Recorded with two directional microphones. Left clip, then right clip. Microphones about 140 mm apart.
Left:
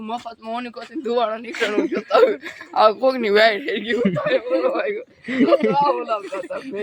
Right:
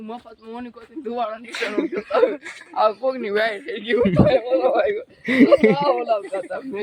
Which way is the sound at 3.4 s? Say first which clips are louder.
Left 7 dB; 90° left.